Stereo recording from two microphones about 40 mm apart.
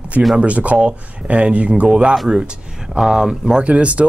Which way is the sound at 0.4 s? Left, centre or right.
Right.